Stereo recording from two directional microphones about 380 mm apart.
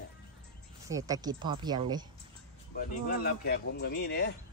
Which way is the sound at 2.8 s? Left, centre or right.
Left.